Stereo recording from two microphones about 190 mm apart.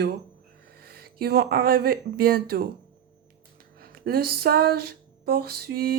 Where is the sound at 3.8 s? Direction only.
55° right (ahead or behind).